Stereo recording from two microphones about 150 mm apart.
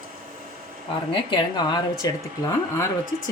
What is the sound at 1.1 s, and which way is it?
Speech, 30° left (ahead or behind).